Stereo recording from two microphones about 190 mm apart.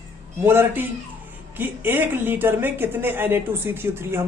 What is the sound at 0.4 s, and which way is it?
A woman's voice, 10° right (ahead or behind).